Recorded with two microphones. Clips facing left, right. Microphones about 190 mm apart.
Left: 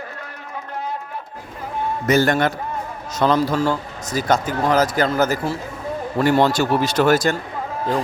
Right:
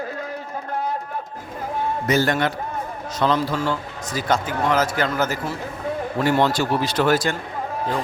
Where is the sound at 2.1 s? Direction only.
50° left (ahead or behind).